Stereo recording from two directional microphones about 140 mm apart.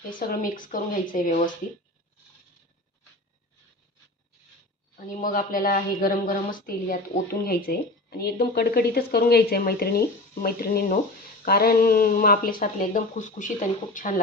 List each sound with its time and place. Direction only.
0.2 s speech: 90° left
4.9 s a woman's voice: 85° left